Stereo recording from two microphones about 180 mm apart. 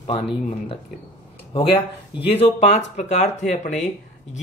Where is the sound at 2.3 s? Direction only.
35° left (ahead or behind).